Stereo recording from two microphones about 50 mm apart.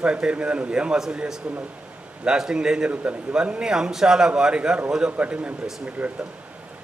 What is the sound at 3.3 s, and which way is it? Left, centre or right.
A man's voice, centre.